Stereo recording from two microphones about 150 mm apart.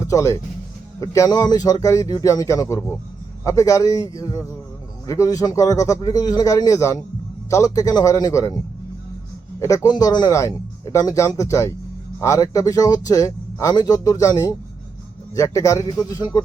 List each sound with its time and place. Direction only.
0.0 s speech: 20° left (ahead or behind)
9.6 s speech: 20° left (ahead or behind)